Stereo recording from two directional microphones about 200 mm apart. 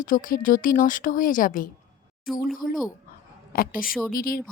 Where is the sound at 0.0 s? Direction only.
40° left (ahead or behind).